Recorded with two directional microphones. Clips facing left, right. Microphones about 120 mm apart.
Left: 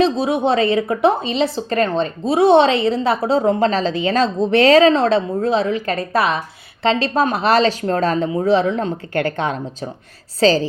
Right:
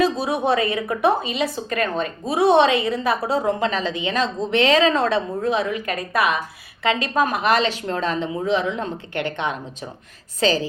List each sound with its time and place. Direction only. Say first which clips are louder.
0.0 s a woman's voice: left 4 dB; 25° left (ahead or behind)